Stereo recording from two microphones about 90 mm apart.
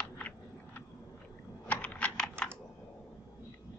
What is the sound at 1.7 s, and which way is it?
Computer keyboard, 15° left (ahead or behind).